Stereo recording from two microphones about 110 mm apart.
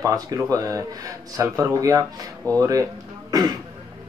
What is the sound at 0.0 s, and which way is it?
Speech, 30° right (ahead or behind).